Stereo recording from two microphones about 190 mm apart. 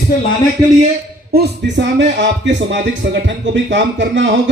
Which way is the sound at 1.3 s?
60° right (ahead or behind).